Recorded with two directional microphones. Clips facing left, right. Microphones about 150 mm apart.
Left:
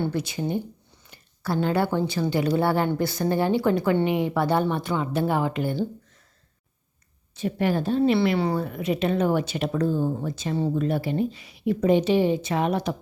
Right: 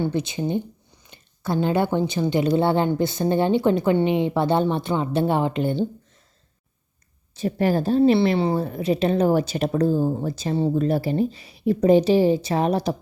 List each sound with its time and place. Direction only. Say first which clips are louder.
0.0 s a woman's voice: right 3 dB; 20° right (ahead or behind)
7.3 s speech: right 3 dB; 35° right (ahead or behind)